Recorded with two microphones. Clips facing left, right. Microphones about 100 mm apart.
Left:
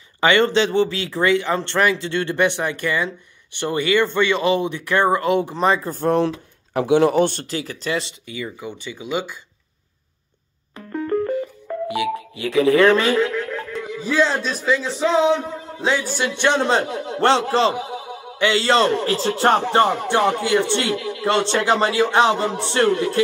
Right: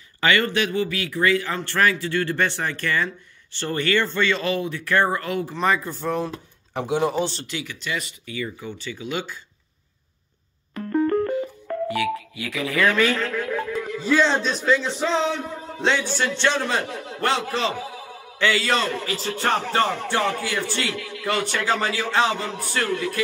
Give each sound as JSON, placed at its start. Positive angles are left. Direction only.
{"t": 0.2, "sound": "a man's voice", "side_deg": 25}
{"t": 5.9, "sound": "speech", "side_deg": 45}
{"t": 6.1, "sound": "speech", "side_deg": 75}
{"t": 7.4, "sound": "speech", "side_deg": 40}
{"t": 8.3, "sound": "speech", "side_deg": 15}
{"t": 11.9, "sound": "telephone dialing", "side_deg": 20}
{"t": 12.4, "sound": "a man's voice", "side_deg": 30}
{"t": 13.2, "sound": "music", "side_deg": 0}
{"t": 14.4, "sound": "speech", "side_deg": 0}
{"t": 15.1, "sound": "speech", "side_deg": 15}
{"t": 15.8, "sound": "a man's voice", "side_deg": 5}
{"t": 17.7, "sound": "speech", "side_deg": 20}
{"t": 19.6, "sound": "a man's voice", "side_deg": 20}